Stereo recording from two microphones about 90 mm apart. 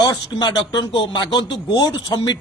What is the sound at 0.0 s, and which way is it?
Speech, 50° left (ahead or behind).